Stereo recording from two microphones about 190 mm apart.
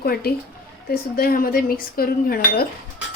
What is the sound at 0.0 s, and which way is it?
Speech, 55° left (ahead or behind).